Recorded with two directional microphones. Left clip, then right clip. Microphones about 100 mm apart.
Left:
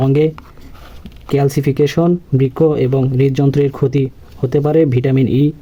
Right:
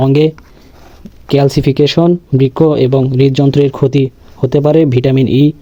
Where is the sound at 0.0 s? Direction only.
35° right (ahead or behind).